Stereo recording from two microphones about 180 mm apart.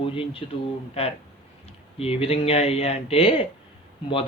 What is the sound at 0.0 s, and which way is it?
A man's voice, 30° left (ahead or behind).